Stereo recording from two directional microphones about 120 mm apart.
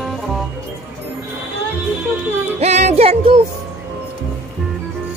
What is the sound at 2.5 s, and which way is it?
Music, 65° right (ahead or behind).